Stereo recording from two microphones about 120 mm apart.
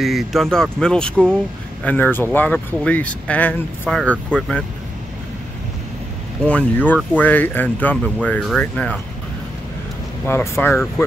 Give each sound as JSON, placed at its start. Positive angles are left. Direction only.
{"t": 0.0, "sound": "speech", "side_deg": 0}
{"t": 6.4, "sound": "speech", "side_deg": 10}
{"t": 10.2, "sound": "speech", "side_deg": 20}